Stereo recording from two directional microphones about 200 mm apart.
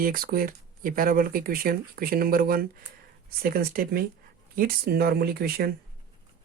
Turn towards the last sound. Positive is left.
turn(degrees=-50)  # may be behind; listen again after turning